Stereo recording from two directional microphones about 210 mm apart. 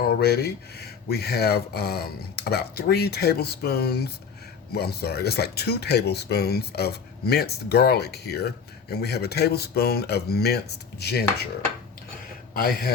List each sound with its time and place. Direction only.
0.2 s speech: 50° left (ahead or behind)
12.5 s speech: 45° left (ahead or behind)